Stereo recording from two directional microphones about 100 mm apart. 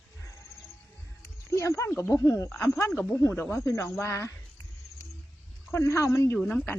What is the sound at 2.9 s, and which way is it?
Speech, 15° left (ahead or behind).